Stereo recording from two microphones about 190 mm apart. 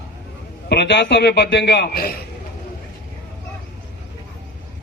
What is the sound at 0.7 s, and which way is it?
A man's voice, 65° left (ahead or behind).